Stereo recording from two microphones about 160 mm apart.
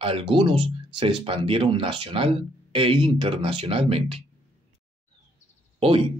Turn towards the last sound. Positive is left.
turn(degrees=-30)  # may be behind; listen again after turning